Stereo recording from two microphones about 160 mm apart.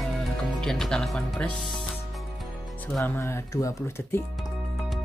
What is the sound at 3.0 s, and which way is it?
Speech, 15° left (ahead or behind).